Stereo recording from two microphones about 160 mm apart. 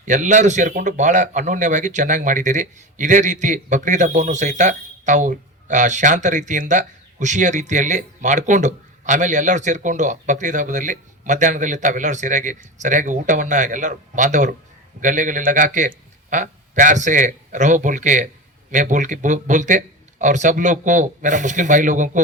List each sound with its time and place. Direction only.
0.0 s speech: 50° right (ahead or behind)